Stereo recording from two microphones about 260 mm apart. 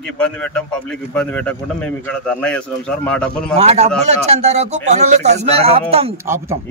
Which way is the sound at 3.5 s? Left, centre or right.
Right.